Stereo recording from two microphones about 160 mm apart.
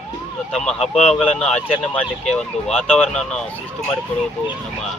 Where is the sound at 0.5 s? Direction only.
5° left (ahead or behind).